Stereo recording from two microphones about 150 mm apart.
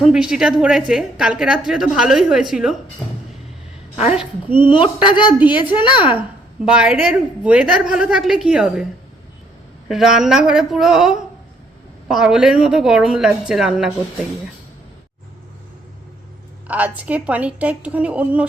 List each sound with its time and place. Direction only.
0.0 s a woman's voice: 5° right (ahead or behind)
4.1 s a woman's voice: 10° right (ahead or behind)
4.6 s a woman's voice: 35° left (ahead or behind)
6.7 s a woman's voice: 5° right (ahead or behind)
9.9 s a woman's voice: 5° right (ahead or behind)
16.6 s a woman's voice: 10° right (ahead or behind)